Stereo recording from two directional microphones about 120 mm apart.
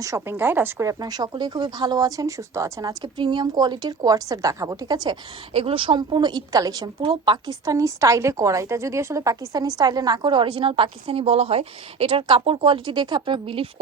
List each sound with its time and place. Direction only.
0.0 s speech: 25° right (ahead or behind)
3.0 s speech: 40° right (ahead or behind)
5.5 s speech: 50° right (ahead or behind)
7.6 s a woman's voice: 30° right (ahead or behind); by 13.7 s 50° right (ahead or behind)